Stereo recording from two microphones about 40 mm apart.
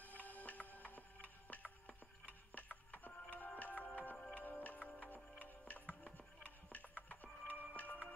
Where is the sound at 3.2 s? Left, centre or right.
Left.